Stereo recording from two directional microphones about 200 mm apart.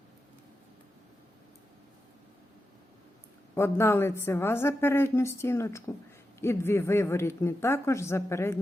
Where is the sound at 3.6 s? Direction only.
10° left (ahead or behind).